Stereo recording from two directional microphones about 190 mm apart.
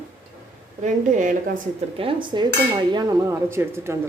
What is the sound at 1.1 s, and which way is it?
Speech, 45° right (ahead or behind).